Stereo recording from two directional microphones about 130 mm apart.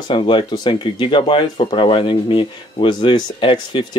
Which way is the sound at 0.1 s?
40° left (ahead or behind).